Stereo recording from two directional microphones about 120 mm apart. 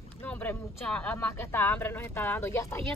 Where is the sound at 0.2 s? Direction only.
15° left (ahead or behind).